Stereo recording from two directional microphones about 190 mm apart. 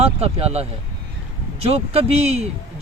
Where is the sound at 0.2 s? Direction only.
30° right (ahead or behind).